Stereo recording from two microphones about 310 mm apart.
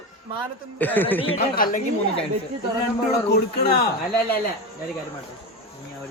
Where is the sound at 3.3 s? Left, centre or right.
Left.